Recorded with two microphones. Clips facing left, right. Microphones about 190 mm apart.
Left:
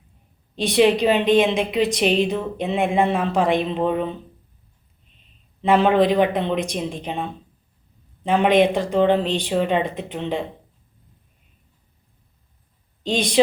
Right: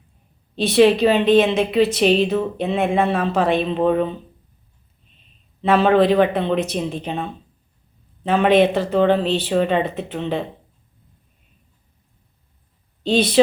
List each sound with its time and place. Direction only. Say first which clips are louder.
0.5 s a woman's voice: right 3 dB; 15° left (ahead or behind)
5.6 s a woman's voice: right 2 dB; 15° left (ahead or behind)
13.0 s a woman's voice: right 4 dB; 15° left (ahead or behind)